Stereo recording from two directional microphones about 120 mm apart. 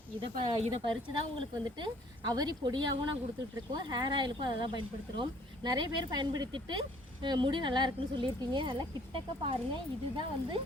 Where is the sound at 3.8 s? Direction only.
40° right (ahead or behind).